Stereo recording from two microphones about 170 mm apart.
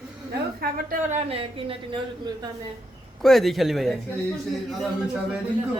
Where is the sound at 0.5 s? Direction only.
55° right (ahead or behind); by 2.0 s 30° right (ahead or behind).